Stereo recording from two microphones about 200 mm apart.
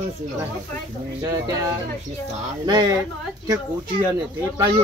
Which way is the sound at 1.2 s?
15° right (ahead or behind).